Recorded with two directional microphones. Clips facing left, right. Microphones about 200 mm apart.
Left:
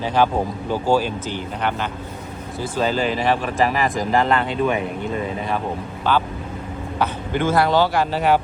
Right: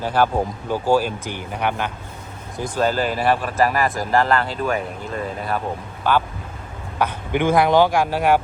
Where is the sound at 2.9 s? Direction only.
45° right (ahead or behind).